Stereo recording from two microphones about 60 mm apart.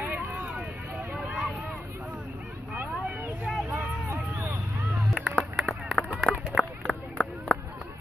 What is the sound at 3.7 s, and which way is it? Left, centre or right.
Vehicle, right.